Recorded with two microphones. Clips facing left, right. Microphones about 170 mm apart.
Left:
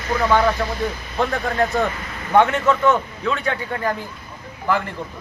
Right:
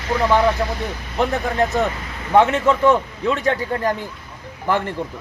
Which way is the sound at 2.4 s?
30° right (ahead or behind).